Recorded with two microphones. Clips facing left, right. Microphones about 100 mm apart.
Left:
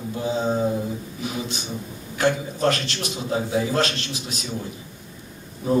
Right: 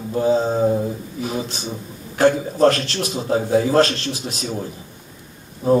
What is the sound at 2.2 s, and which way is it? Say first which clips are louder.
A man's voice: right 6 dB; 40° right (ahead or behind).